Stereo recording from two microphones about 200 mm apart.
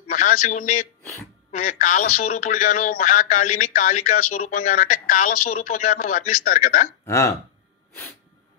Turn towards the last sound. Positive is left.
turn(degrees=15)  # may be behind; listen again after turning